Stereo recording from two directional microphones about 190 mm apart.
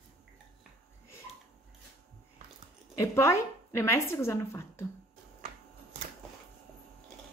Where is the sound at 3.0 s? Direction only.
15° left (ahead or behind).